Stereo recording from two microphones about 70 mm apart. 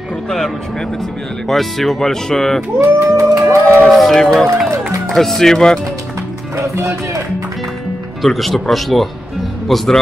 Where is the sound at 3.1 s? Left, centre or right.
Right.